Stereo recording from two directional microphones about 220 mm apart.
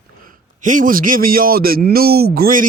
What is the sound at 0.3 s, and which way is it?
A man's voice, 35° right (ahead or behind).